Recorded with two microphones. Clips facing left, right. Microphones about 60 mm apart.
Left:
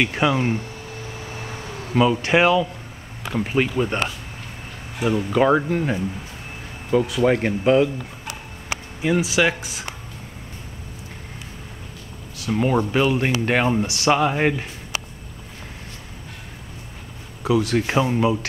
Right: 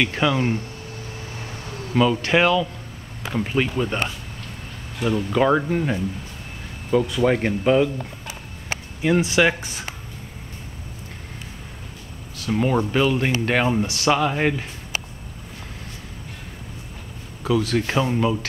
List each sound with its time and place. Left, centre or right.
0.0 s speech: centre
2.0 s speech: centre
9.0 s speech: centre
12.4 s speech: centre
17.4 s speech: centre